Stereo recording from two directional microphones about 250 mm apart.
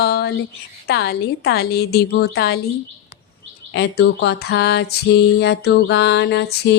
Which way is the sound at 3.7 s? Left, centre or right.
Left.